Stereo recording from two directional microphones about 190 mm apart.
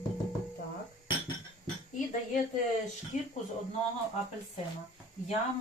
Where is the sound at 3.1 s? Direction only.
40° left (ahead or behind).